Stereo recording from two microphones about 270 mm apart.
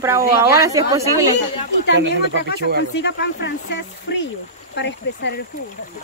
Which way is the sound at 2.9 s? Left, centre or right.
Left.